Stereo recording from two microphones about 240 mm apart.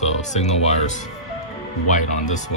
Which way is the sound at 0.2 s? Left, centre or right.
Left.